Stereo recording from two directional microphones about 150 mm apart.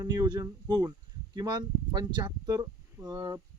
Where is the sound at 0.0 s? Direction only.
25° right (ahead or behind).